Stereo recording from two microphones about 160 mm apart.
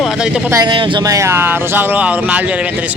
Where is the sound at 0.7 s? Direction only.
20° right (ahead or behind).